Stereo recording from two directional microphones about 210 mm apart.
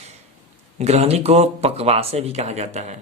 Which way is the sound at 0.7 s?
30° right (ahead or behind).